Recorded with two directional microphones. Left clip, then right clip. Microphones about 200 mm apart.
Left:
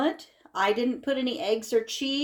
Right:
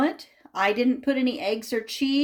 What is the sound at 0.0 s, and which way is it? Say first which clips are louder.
Speech: right 2 dB; 30° right (ahead or behind).